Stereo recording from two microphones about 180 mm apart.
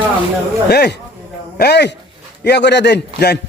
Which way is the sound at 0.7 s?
65° left (ahead or behind).